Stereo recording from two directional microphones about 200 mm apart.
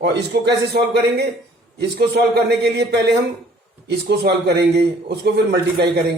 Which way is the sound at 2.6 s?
55° right (ahead or behind).